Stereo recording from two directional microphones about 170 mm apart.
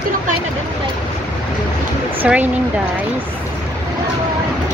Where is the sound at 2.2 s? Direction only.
10° right (ahead or behind).